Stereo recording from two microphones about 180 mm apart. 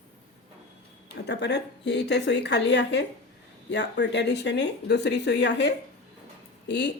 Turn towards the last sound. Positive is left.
turn(degrees=70)  # may be behind; listen again after turning